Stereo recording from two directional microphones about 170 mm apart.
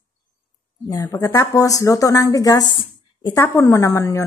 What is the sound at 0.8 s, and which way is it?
A woman's voice, 20° left (ahead or behind).